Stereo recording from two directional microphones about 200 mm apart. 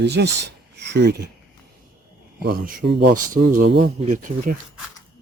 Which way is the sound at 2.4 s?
50° right (ahead or behind).